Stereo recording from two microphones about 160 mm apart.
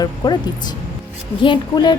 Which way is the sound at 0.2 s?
25° left (ahead or behind).